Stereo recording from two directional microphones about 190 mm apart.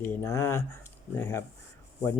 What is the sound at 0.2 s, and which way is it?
Speech, 15° left (ahead or behind).